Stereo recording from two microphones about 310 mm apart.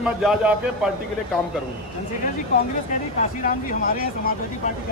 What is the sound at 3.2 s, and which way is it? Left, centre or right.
Speech, left.